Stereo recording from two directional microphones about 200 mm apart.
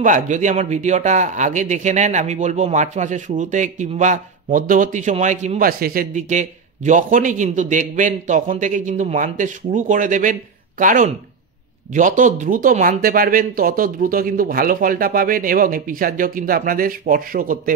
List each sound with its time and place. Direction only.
0.0 s speech: 40° right (ahead or behind)